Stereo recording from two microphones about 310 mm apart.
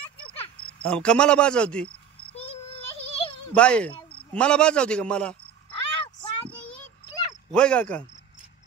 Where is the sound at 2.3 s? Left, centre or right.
Centre.